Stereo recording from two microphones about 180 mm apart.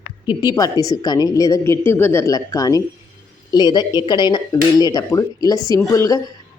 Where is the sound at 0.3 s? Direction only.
20° left (ahead or behind).